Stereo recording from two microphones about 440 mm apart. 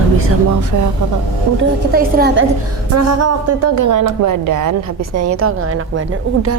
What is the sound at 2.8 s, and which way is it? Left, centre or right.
A woman's voice, right.